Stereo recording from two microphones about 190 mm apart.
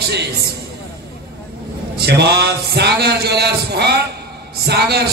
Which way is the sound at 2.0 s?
60° right (ahead or behind).